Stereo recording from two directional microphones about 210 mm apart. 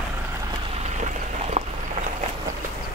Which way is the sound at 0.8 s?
30° right (ahead or behind).